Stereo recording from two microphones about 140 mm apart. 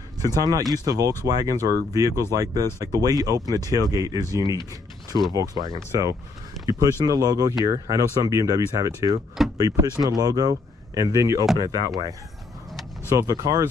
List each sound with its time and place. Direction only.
0.2 s speech: 25° right (ahead or behind)